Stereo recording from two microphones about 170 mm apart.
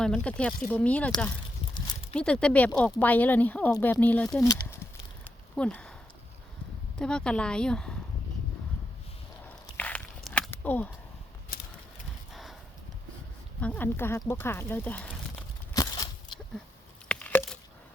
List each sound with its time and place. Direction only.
0.0 s speech: 5° left (ahead or behind)
1.7 s horse: 30° left (ahead or behind)
2.1 s speech: 5° left (ahead or behind)
5.5 s speech: 5° left (ahead or behind)
7.0 s a woman's voice: 5° left (ahead or behind)
9.7 s walk: 10° left (ahead or behind)
10.5 s a sound: 10° left (ahead or behind)
11.5 s mechanisms: 60° left (ahead or behind)
12.3 s horse: centre (ahead or behind)
13.6 s speech: 10° left (ahead or behind)
15.7 s a sound: 20° left (ahead or behind)
17.1 s a sound: 10° left (ahead or behind)